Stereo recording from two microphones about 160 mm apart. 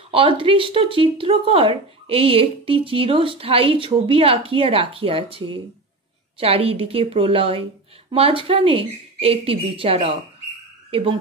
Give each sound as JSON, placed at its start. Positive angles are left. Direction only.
{"t": 0.1, "sound": "speech", "side_deg": -35}
{"t": 10.9, "sound": "frog", "side_deg": -35}